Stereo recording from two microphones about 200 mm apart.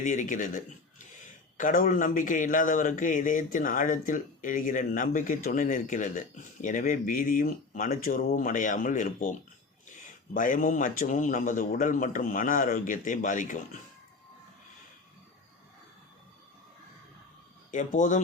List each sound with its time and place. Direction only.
0.0 s speech: 40° left (ahead or behind)
17.7 s speech: 40° left (ahead or behind)